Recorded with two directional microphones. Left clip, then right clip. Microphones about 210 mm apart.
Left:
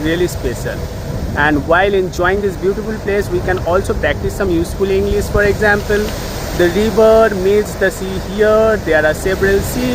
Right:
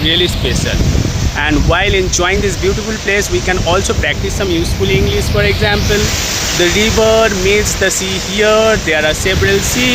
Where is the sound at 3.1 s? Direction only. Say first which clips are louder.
Right 2 dB; 35° right (ahead or behind).